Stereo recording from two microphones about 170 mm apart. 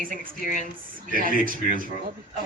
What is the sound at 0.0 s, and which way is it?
A woman's voice, 55° right (ahead or behind).